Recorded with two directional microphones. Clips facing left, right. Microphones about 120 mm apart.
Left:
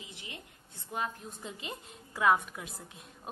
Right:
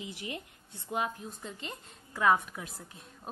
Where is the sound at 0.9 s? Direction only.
15° right (ahead or behind).